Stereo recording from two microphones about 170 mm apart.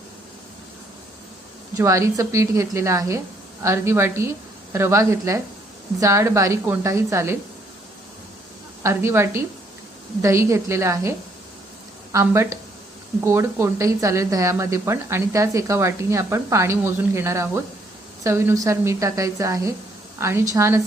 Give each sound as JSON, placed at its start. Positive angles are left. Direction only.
{"t": 1.8, "sound": "a woman's voice", "side_deg": -15}
{"t": 8.8, "sound": "a woman's voice", "side_deg": -15}
{"t": 12.1, "sound": "a woman's voice", "side_deg": -15}